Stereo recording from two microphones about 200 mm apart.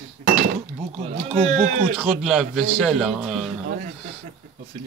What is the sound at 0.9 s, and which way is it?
Speech, 35° right (ahead or behind).